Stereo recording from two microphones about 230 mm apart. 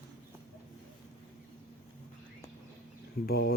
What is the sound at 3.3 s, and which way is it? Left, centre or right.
Speech, left.